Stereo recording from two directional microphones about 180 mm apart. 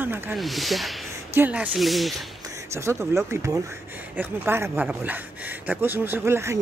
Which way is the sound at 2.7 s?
15° right (ahead or behind).